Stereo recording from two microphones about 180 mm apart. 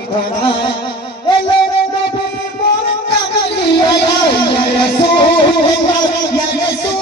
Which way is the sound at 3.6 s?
70° left (ahead or behind).